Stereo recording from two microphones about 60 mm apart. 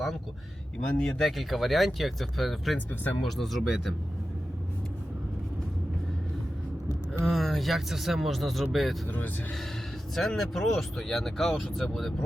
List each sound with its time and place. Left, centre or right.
0.9 s speech: centre
2.7 s speech: left
3.2 s speech: centre
7.3 s speech: centre
9.0 s speech: left
10.2 s speech: centre